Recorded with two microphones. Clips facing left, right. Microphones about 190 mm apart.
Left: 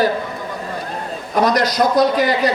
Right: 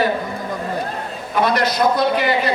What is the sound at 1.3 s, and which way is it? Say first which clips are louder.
A man's voice: left 2 dB; 40° left (ahead or behind).